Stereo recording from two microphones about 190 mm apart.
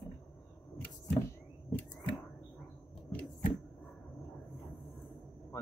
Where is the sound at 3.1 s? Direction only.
5° left (ahead or behind).